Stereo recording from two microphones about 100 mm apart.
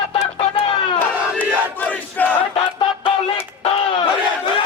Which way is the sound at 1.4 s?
20° left (ahead or behind).